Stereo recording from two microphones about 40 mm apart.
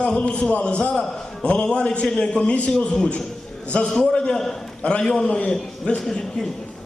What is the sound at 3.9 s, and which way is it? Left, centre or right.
A man's voice, left.